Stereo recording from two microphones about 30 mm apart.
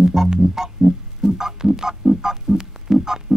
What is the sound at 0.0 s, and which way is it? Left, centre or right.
Music, centre.